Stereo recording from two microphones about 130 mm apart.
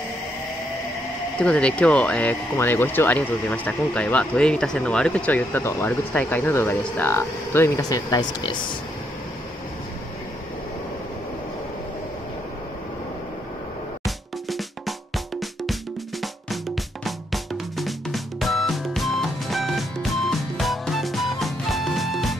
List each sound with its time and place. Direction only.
1.4 s speech: 10° left (ahead or behind); by 8.5 s 35° left (ahead or behind)
14.0 s music: centre (ahead or behind)